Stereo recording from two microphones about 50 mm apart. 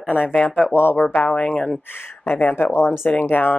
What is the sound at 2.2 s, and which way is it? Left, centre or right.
Speech, left.